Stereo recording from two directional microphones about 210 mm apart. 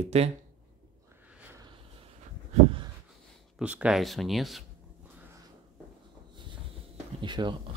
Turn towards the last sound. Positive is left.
turn(degrees=-20)  # may be behind; listen again after turning